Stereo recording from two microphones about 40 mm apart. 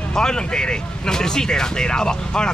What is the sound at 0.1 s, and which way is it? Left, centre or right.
Speech, centre.